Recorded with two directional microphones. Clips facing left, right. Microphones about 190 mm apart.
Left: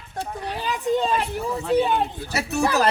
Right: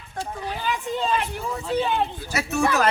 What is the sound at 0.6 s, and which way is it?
Speech, 35° left (ahead or behind).